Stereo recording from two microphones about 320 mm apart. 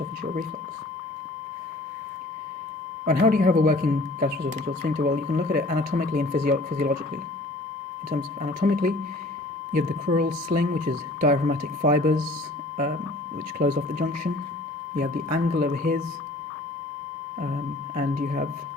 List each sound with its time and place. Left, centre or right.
3.1 s speech: right
8.1 s speech: right
13.6 s speech: right
15.5 s speech: right
17.9 s speech: right